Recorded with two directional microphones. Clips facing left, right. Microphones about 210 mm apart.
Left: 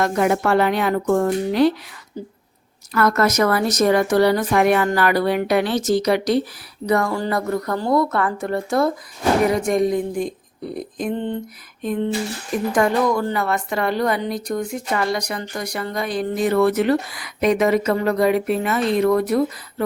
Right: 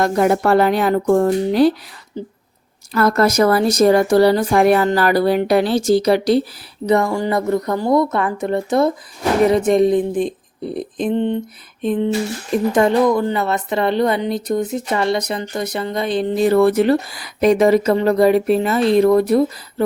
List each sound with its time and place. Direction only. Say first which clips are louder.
0.0 s speech: right 3 dB; 35° right (ahead or behind)